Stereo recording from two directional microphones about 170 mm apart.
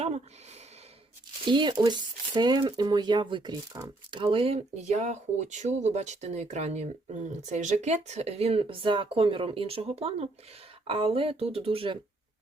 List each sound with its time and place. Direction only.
1.5 s speech: 25° right (ahead or behind)